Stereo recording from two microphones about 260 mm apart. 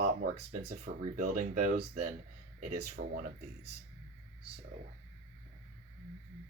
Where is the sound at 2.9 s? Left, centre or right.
Right.